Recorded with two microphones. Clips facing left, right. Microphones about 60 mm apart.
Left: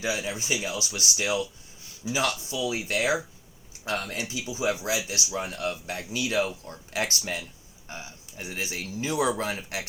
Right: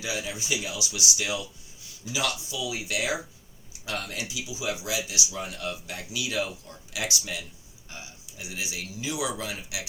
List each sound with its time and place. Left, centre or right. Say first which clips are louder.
0.0 s speech: left 3 dB; left